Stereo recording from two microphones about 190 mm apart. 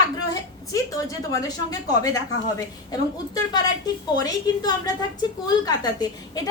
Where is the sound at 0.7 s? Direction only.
15° left (ahead or behind).